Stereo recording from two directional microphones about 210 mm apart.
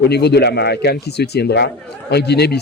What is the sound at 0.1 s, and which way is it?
A man's voice, 50° left (ahead or behind).